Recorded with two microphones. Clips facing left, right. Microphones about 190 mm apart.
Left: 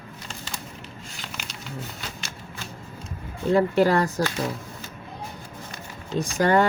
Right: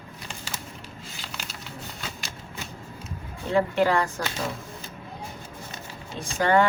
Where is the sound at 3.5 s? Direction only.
40° left (ahead or behind).